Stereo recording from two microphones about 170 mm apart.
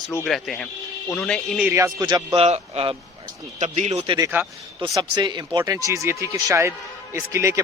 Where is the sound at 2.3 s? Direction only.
35° right (ahead or behind).